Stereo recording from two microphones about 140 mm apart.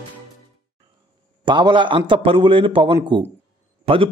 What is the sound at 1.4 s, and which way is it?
A man's voice, 35° right (ahead or behind).